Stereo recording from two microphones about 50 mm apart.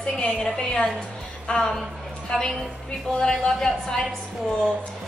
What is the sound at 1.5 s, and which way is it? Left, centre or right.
Speech, left.